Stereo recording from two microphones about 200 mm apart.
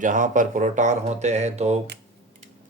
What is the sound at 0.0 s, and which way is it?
Speech, 40° right (ahead or behind).